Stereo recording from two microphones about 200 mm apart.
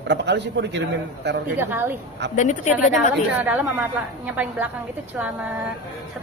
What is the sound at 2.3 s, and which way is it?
Speech, 40° left (ahead or behind).